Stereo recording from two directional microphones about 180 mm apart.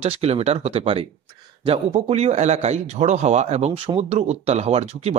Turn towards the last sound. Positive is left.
turn(degrees=-35)  # may be behind; listen again after turning